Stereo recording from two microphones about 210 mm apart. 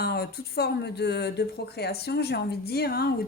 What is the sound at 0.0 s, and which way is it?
Speech, 50° left (ahead or behind).